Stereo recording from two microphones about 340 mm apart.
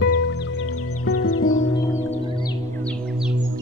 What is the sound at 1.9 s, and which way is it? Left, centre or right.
Music, centre.